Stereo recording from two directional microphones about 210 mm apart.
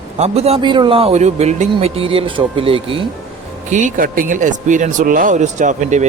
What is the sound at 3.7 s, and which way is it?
A man's voice, 35° right (ahead or behind).